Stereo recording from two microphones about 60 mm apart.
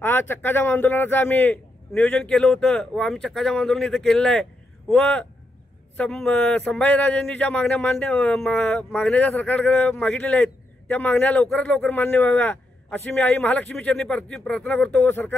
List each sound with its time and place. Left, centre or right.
0.0 s a man's voice: left
2.2 s speech: centre
4.9 s a man's voice: left
6.4 s a man's voice: centre
14.7 s a man's voice: left
15.0 s a man's voice: left